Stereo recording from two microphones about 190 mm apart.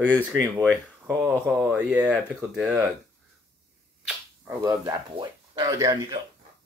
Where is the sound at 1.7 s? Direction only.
5° right (ahead or behind).